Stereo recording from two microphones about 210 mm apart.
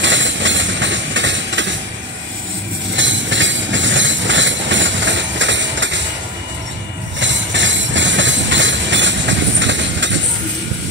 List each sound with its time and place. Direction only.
0.0 s train: 60° right (ahead or behind)
3.0 s train: 60° right (ahead or behind)
7.2 s train: 60° right (ahead or behind)